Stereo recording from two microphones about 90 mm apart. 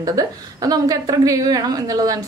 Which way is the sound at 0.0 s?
40° right (ahead or behind).